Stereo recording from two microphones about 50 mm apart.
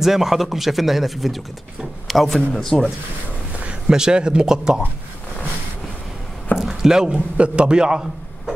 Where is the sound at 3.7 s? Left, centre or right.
Centre.